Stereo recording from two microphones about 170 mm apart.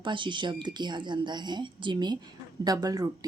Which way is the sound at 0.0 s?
30° right (ahead or behind).